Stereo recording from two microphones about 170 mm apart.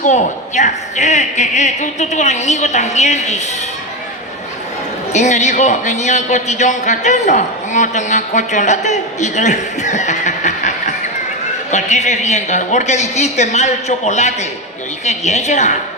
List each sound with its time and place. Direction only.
0.0 s a man's voice: 45° left (ahead or behind)
5.1 s a man's voice: 45° left (ahead or behind)